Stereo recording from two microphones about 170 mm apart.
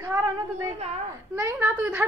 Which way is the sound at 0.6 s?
40° right (ahead or behind).